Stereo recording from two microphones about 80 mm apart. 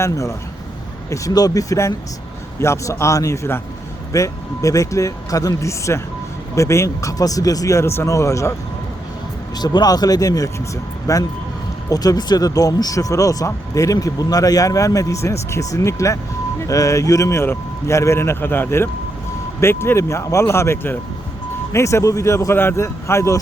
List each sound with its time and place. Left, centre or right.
0.0 s speech: left
9.6 s speech: left